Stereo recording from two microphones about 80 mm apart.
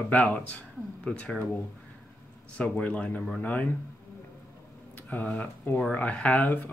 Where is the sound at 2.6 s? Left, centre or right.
Centre.